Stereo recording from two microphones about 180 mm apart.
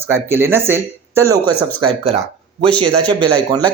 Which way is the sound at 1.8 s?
30° right (ahead or behind).